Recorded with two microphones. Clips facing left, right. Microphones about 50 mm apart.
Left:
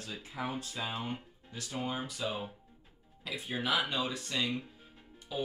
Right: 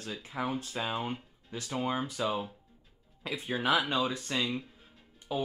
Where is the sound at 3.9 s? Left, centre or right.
Right.